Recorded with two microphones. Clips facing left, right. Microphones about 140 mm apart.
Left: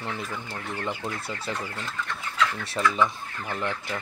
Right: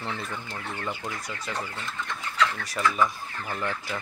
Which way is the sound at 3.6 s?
20° left (ahead or behind).